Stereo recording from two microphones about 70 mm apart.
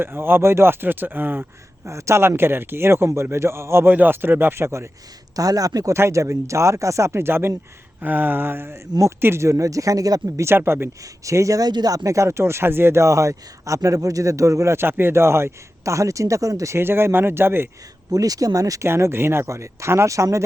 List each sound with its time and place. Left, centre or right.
0.0 s speech: right
1.9 s speech: right
5.4 s speech: right
5.9 s speech: right
8.0 s a sound: right
9.2 s speech: right
10.4 s speech: right
11.0 s speech: right
11.7 s speech: right
12.0 s speech: right
16.7 s speech: right
18.1 s speech: right
18.9 s speech: right